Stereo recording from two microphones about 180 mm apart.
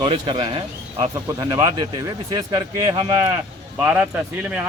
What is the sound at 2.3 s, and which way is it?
Speech, 20° right (ahead or behind).